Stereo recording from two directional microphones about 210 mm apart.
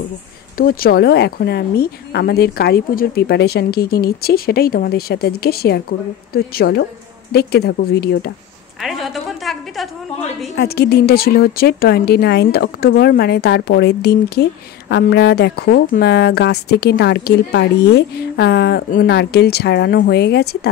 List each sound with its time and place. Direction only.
0.6 s a woman's voice: 45° left (ahead or behind)
8.8 s a sound: centre (ahead or behind)
10.5 s a woman's voice: 50° left (ahead or behind)